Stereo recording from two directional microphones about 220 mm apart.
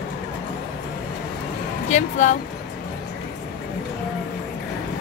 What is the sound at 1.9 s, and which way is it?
Speech, 35° left (ahead or behind).